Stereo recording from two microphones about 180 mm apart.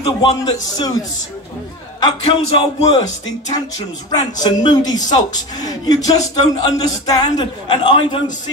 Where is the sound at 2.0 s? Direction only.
30° left (ahead or behind).